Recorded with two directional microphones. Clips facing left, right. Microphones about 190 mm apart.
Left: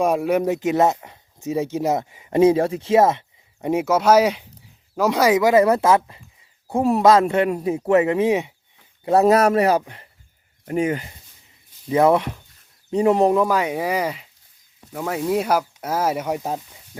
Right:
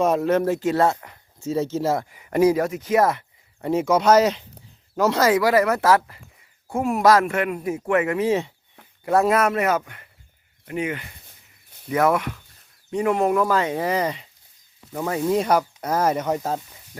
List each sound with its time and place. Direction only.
0.0 s speech: 10° left (ahead or behind)
3.7 s speech: 10° left (ahead or behind)
9.0 s speech: 35° left (ahead or behind)
13.4 s speech: 10° left (ahead or behind)